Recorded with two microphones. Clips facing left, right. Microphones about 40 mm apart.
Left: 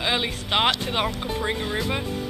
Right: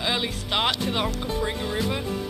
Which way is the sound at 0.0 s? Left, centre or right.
Centre.